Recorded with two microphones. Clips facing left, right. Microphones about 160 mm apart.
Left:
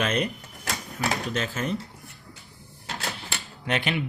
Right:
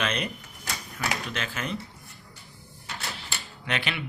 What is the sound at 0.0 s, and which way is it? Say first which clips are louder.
Speech: left 4 dB; 45° left (ahead or behind).